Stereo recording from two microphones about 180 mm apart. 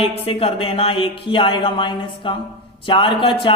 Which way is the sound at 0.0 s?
35° left (ahead or behind).